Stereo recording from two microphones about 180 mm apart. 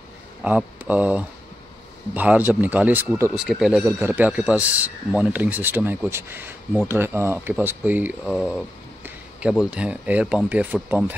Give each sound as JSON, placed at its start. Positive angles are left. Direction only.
{"t": 0.4, "sound": "speech", "side_deg": -5}
{"t": 3.8, "sound": "speech", "side_deg": -15}